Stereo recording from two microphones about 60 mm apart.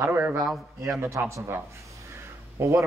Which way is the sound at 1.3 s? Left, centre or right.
Right.